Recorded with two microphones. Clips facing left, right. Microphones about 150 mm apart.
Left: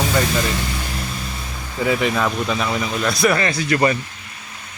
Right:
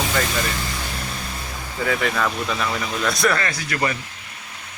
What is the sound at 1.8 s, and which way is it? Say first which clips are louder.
Speech: left 3 dB; 15° left (ahead or behind).